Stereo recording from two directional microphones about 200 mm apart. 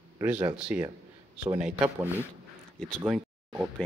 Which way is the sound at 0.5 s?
5° right (ahead or behind).